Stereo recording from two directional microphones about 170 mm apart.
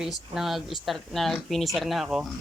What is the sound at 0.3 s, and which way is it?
Speech, centre (ahead or behind).